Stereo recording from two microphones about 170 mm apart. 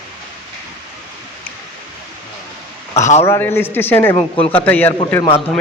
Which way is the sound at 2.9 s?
40° left (ahead or behind).